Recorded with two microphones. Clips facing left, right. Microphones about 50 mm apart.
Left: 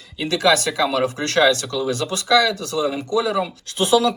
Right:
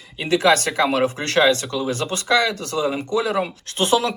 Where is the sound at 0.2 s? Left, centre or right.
Right.